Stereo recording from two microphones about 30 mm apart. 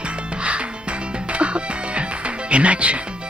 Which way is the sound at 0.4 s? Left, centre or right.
Right.